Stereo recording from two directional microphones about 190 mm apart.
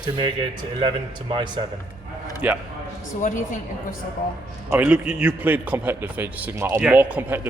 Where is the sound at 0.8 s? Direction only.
25° right (ahead or behind).